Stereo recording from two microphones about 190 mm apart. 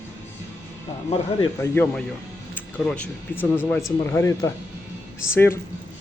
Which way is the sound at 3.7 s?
Centre (ahead or behind).